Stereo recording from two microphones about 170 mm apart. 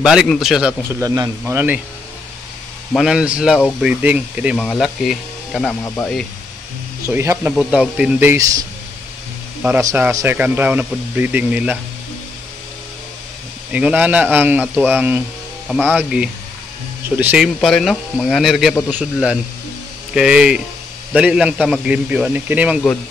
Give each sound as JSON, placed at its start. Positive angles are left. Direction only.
{"t": 0.0, "sound": "speech", "side_deg": -5}
{"t": 1.0, "sound": "speech", "side_deg": -20}
{"t": 1.4, "sound": "speech", "side_deg": -10}
{"t": 2.9, "sound": "speech", "side_deg": 0}
{"t": 7.1, "sound": "speech", "side_deg": -15}
{"t": 9.8, "sound": "speech", "side_deg": -15}
{"t": 13.7, "sound": "speech", "side_deg": -10}
{"t": 17.6, "sound": "speech", "side_deg": 0}